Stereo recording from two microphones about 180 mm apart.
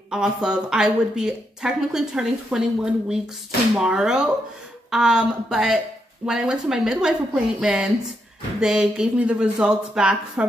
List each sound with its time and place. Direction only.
0.1 s speech: 5° right (ahead or behind)